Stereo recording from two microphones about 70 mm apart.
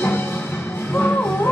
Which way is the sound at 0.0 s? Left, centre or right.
Left.